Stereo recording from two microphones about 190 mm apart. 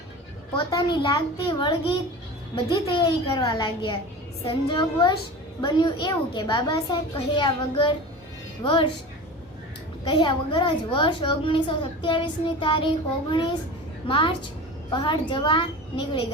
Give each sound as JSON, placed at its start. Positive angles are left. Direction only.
{"t": 0.5, "sound": "a child's voice", "side_deg": 20}
{"t": 10.0, "sound": "a child's voice", "side_deg": 25}